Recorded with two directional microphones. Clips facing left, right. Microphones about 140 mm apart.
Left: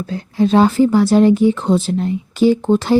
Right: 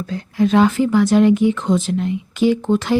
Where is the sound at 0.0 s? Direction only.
35° left (ahead or behind).